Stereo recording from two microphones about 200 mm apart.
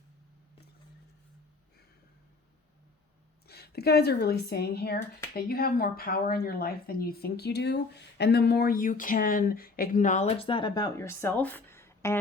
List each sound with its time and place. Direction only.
3.4 s speech: 50° left (ahead or behind); by 12.2 s 15° left (ahead or behind)